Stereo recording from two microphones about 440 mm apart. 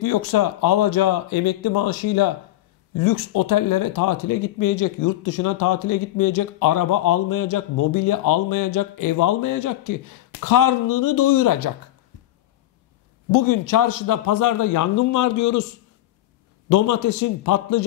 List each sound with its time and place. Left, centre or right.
0.0 s speech: left
13.3 s speech: left
16.6 s a man's voice: left